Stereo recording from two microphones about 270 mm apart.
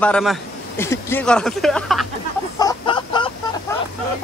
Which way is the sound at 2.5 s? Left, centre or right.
Centre.